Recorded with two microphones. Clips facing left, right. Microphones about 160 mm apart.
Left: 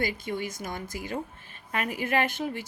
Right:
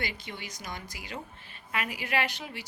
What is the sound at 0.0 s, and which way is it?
A woman's voice, 45° left (ahead or behind).